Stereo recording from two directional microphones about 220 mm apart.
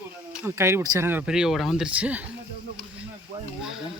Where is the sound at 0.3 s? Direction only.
10° right (ahead or behind).